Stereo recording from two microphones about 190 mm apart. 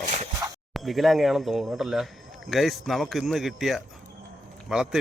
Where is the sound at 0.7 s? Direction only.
Centre (ahead or behind).